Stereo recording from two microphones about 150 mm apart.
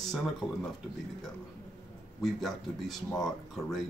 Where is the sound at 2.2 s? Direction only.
Centre (ahead or behind).